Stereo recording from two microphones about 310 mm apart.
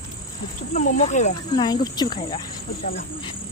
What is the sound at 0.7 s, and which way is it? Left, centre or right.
Speech, left.